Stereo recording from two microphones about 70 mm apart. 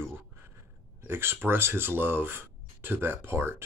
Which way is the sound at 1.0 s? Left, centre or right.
Right.